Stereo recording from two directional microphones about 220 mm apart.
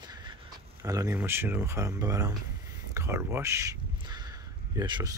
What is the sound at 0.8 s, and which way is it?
Speech, 15° right (ahead or behind).